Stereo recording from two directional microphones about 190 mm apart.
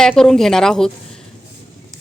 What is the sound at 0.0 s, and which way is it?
Speech, 5° left (ahead or behind).